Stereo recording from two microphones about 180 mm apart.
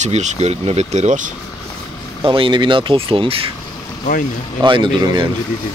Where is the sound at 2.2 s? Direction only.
30° right (ahead or behind).